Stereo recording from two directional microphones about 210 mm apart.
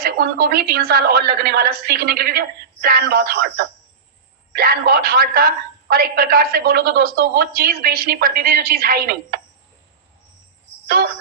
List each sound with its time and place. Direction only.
0.0 s a woman's voice: 45° right (ahead or behind)
10.8 s speech: 45° right (ahead or behind)